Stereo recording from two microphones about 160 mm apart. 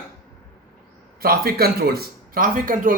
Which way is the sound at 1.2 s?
70° right (ahead or behind).